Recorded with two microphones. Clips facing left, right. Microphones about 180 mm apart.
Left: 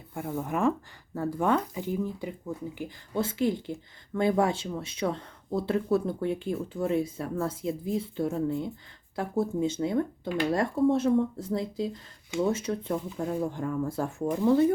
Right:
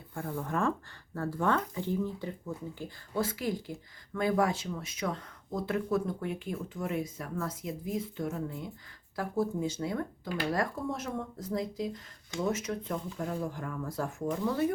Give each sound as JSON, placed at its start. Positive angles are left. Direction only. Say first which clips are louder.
{"t": 0.1, "sound": "speech", "louder": "left 3 dB", "side_deg": 20}
{"t": 3.2, "sound": "speech", "louder": "left 5 dB", "side_deg": 25}